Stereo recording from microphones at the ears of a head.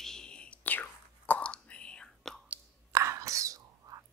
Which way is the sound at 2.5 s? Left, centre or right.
Right.